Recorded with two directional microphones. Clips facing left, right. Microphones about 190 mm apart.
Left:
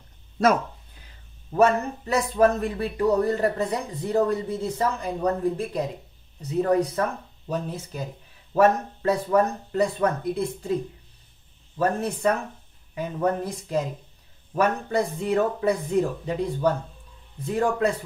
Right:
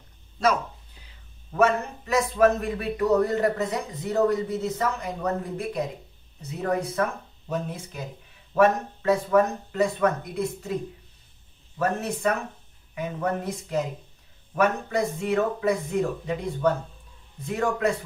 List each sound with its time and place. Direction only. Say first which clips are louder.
1.5 s speech: left 2 dB; 35° left (ahead or behind)
11.8 s speech: left 2 dB; 30° left (ahead or behind)